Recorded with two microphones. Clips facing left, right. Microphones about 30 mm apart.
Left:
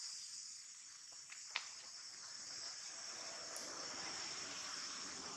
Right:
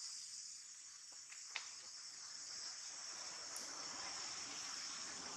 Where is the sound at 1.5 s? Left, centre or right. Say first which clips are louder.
Left 4 dB; left.